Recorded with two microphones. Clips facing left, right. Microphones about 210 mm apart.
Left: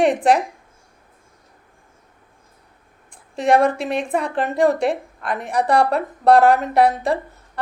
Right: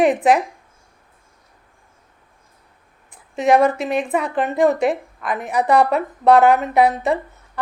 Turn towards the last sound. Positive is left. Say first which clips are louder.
# even
turn(degrees=-5)  # may be behind; listen again after turning